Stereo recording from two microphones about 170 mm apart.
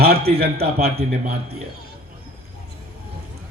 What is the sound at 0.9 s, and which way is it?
Speech, 35° right (ahead or behind).